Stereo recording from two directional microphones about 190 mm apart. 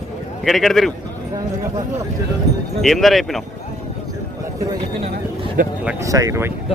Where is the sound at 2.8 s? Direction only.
Centre (ahead or behind).